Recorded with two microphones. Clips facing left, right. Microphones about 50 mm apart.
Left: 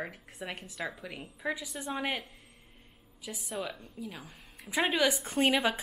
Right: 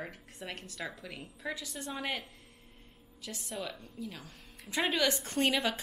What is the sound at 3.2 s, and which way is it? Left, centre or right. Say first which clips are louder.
A woman's voice: left 3 dB; centre.